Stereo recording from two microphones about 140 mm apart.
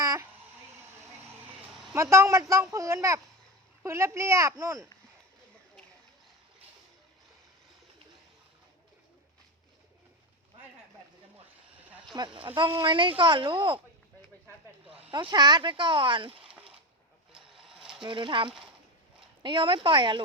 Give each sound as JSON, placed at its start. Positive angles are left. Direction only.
{"t": 0.0, "sound": "a sound", "side_deg": -25}
{"t": 1.9, "sound": "speech", "side_deg": -20}
{"t": 12.1, "sound": "speech", "side_deg": -35}
{"t": 14.8, "sound": "speech", "side_deg": -40}
{"t": 16.4, "sound": "a sound", "side_deg": -5}
{"t": 18.0, "sound": "speech", "side_deg": -35}